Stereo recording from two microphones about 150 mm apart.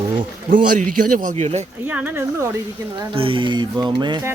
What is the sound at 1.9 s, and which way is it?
Speech, 10° right (ahead or behind).